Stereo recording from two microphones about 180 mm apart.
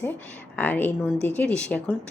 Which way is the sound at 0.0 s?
10° left (ahead or behind).